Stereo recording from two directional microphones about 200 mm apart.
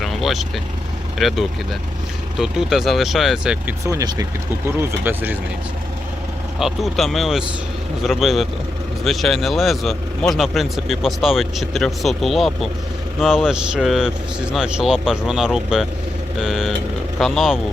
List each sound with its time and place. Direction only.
0.0 s vehicle: centre (ahead or behind)
1.2 s speech: centre (ahead or behind)
2.4 s speech: centre (ahead or behind)
6.6 s speech: centre (ahead or behind)